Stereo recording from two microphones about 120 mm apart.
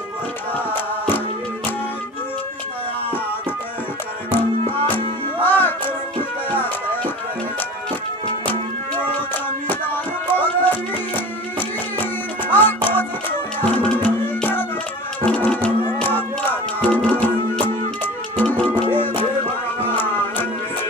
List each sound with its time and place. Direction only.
0.7 s music: 15° left (ahead or behind)
4.3 s music: 15° left (ahead or behind)
9.7 s music: 15° left (ahead or behind)
12.0 s music: 15° left (ahead or behind)